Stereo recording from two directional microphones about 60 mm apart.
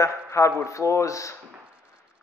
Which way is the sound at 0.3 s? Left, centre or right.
Left.